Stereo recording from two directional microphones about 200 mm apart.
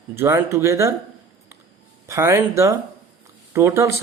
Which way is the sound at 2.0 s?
15° right (ahead or behind).